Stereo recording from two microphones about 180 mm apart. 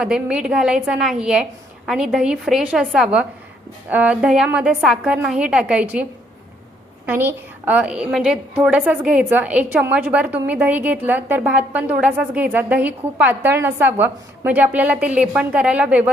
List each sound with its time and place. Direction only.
0.0 s a woman's voice: 5° right (ahead or behind)